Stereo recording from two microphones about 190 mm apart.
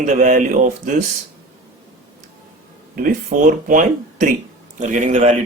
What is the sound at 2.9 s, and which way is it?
A man's voice, 45° right (ahead or behind).